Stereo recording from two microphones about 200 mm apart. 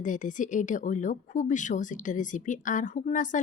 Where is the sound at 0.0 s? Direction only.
40° left (ahead or behind).